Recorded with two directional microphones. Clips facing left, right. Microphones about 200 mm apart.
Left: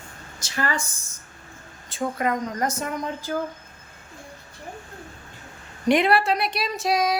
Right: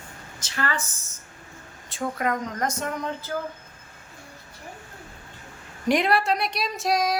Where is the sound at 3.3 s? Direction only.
25° left (ahead or behind).